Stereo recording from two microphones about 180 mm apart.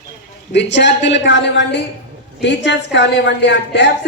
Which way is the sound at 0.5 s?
75° left (ahead or behind).